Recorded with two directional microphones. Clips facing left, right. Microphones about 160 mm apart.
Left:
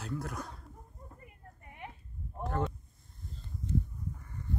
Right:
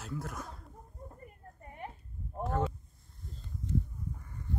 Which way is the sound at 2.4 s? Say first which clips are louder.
Right 1 dB; 5° right (ahead or behind).